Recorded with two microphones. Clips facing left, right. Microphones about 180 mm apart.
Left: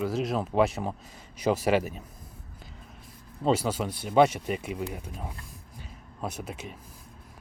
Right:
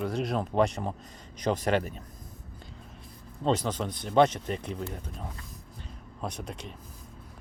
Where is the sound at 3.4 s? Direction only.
10° left (ahead or behind).